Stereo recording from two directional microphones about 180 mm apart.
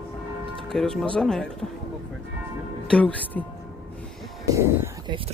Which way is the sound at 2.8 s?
5° left (ahead or behind).